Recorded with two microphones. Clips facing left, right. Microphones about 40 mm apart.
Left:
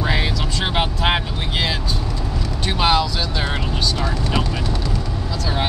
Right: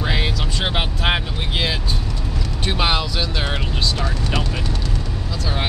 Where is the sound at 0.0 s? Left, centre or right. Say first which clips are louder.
Left 1 dB; centre.